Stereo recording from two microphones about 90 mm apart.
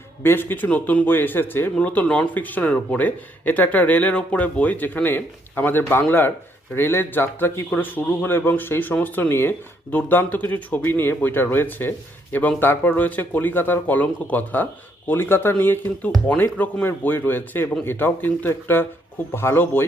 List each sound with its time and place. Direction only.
0.2 s a man's voice: 25° left (ahead or behind)